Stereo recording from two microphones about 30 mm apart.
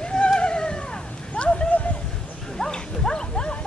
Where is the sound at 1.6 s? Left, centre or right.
Left.